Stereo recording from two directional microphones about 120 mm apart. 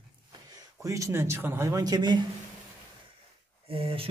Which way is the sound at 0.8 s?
25° right (ahead or behind).